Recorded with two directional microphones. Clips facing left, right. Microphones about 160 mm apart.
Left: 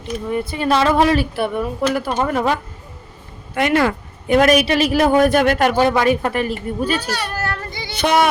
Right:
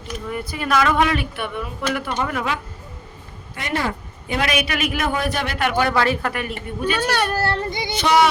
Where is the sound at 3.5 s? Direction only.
70° left (ahead or behind).